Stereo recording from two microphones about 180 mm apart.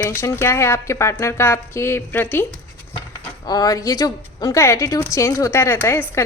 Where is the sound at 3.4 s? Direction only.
20° left (ahead or behind).